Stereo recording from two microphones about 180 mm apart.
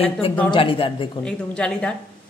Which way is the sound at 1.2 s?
5° left (ahead or behind).